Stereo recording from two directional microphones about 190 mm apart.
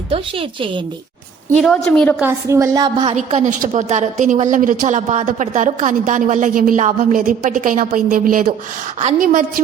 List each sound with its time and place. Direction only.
0.1 s a woman's voice: 30° right (ahead or behind)
1.5 s a woman's voice: 5° left (ahead or behind)
2.2 s a woman's voice: 15° right (ahead or behind)
3.1 s a woman's voice: 35° right (ahead or behind)